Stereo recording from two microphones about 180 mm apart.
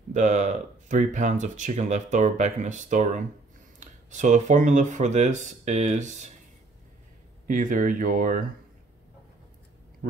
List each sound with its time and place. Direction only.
0.1 s speech: 40° right (ahead or behind)
7.4 s speech: 45° right (ahead or behind)